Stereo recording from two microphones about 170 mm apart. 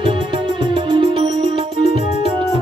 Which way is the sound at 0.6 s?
30° right (ahead or behind).